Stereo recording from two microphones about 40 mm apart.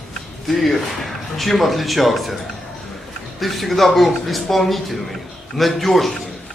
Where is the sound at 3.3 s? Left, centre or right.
Centre.